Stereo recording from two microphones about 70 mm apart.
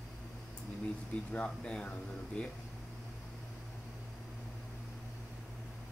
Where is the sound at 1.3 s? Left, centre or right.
Centre.